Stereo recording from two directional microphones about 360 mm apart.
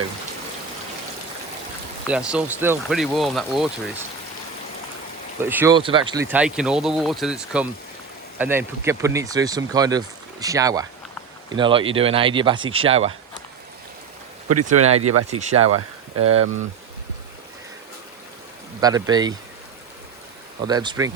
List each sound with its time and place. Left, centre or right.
2.0 s speech: centre
5.4 s speech: centre
14.4 s speech: right
14.8 s speech: centre
16.1 s speech: right
18.8 s speech: centre
20.7 s speech: centre